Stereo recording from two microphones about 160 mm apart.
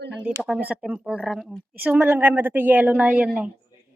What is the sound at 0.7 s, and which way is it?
Speech, 10° right (ahead or behind).